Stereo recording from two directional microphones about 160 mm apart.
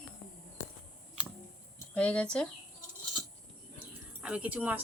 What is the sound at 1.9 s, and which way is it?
Speech, 5° left (ahead or behind).